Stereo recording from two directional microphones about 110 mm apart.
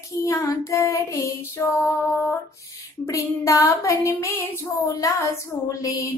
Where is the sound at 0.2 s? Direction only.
30° left (ahead or behind).